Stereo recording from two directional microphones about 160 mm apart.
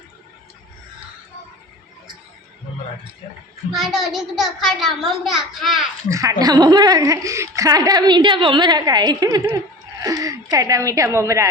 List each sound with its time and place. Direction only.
3.7 s a child's voice: centre (ahead or behind)
6.1 s a woman's voice: 20° right (ahead or behind)